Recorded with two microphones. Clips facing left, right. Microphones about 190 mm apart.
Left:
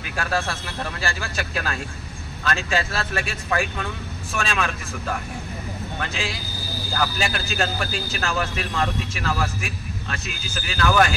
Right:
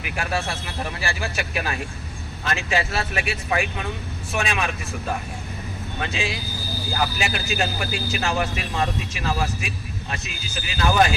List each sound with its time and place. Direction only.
0.1 s speech: 20° right (ahead or behind)
5.9 s speech: 20° right (ahead or behind)